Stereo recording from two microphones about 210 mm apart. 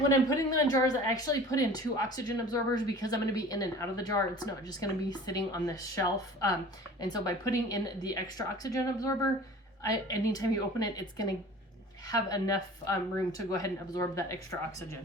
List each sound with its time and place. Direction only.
0.3 s speech: 15° left (ahead or behind)